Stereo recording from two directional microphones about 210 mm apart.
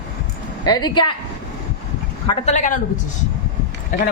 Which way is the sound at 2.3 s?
30° left (ahead or behind).